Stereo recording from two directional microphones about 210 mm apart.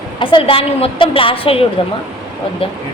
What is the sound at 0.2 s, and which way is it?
A woman's voice, 25° left (ahead or behind).